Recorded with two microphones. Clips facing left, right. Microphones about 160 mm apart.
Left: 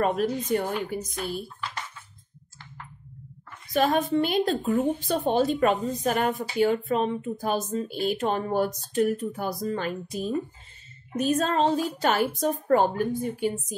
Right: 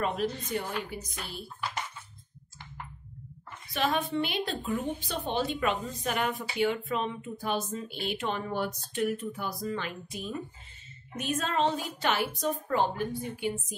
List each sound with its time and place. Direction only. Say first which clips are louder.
0.0 s a woman's voice: left 6 dB; 50° left (ahead or behind)
3.7 s a woman's voice: left 6 dB; 45° left (ahead or behind)